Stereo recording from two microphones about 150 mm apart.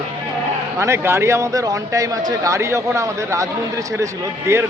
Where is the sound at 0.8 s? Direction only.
20° right (ahead or behind).